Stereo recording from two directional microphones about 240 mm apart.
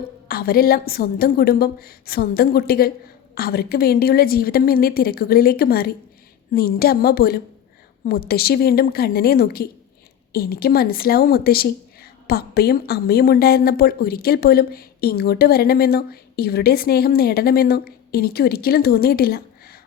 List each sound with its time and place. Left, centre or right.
0.3 s a woman's voice: left